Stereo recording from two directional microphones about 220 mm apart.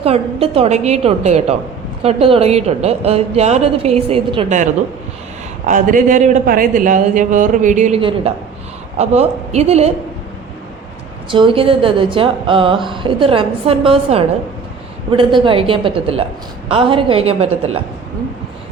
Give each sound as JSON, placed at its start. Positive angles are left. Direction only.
{"t": 0.0, "sound": "a woman's voice", "side_deg": -25}
{"t": 11.3, "sound": "a woman's voice", "side_deg": -25}